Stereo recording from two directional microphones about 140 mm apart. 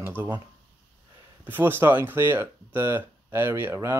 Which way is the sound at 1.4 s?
15° right (ahead or behind).